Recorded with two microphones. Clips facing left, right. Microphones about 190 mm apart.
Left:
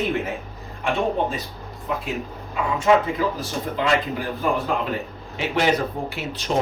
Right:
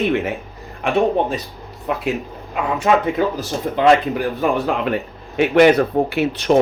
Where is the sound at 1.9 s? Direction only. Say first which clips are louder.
Right 4 dB; 70° right (ahead or behind).